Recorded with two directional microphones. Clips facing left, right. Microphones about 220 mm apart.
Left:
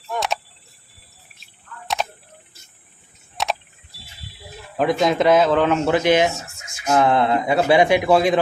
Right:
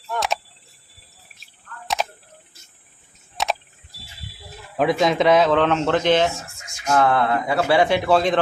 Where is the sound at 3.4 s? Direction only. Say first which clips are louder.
Even; centre (ahead or behind).